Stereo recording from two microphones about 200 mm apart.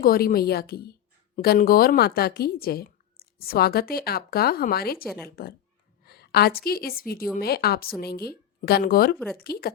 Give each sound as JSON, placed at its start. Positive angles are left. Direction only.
{"t": 0.0, "sound": "a woman's voice", "side_deg": 45}
{"t": 6.1, "sound": "a sound", "side_deg": 50}
{"t": 6.7, "sound": "a woman's voice", "side_deg": 50}
{"t": 9.1, "sound": "speech", "side_deg": 5}
{"t": 9.4, "sound": "a woman's voice", "side_deg": 50}